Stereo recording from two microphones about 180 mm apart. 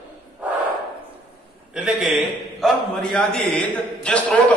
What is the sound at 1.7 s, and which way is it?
A man's voice, 5° right (ahead or behind).